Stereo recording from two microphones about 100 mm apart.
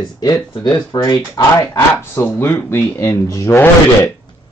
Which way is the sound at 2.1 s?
20° left (ahead or behind).